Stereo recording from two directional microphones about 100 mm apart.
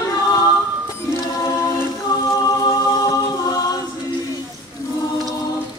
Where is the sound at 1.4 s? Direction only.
35° left (ahead or behind).